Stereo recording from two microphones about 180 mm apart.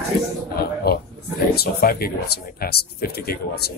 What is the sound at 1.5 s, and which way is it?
Speech, 60° left (ahead or behind).